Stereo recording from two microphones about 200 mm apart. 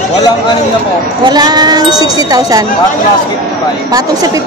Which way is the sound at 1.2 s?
20° right (ahead or behind).